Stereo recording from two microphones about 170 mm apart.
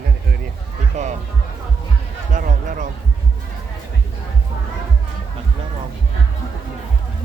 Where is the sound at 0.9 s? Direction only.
45° right (ahead or behind).